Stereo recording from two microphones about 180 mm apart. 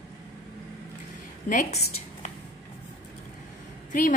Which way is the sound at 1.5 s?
45° left (ahead or behind).